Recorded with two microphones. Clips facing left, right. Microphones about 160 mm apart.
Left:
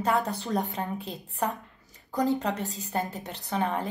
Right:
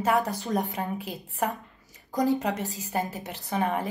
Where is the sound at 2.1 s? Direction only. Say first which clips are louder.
Right 1 dB; 15° right (ahead or behind).